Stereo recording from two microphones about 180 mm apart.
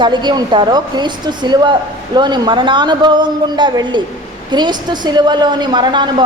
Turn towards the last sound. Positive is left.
turn(degrees=-25)  # may be behind; listen again after turning